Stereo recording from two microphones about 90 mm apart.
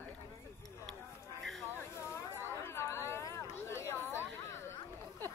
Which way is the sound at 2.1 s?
30° left (ahead or behind).